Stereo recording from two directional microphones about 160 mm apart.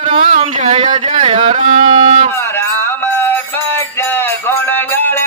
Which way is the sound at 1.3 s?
35° right (ahead or behind).